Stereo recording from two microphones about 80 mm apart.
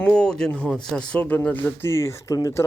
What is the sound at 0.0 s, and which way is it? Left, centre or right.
Speech, centre.